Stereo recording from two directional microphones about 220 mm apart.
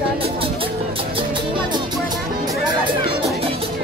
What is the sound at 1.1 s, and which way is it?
Music, 20° right (ahead or behind).